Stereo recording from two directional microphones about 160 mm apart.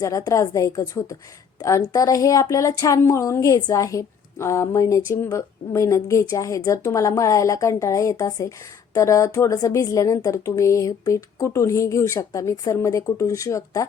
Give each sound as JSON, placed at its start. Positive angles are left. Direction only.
{"t": 0.0, "sound": "a woman's voice", "side_deg": 20}